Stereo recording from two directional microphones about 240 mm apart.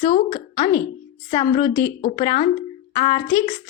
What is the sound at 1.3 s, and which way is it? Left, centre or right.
Speech, centre.